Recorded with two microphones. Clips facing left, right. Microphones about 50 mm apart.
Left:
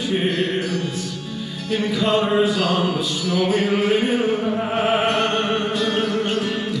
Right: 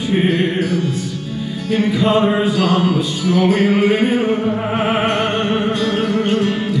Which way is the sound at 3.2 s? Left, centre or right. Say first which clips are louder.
Right 5 dB; centre.